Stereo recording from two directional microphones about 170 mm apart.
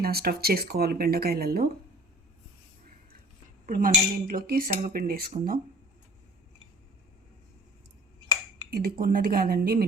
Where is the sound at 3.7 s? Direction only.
55° right (ahead or behind).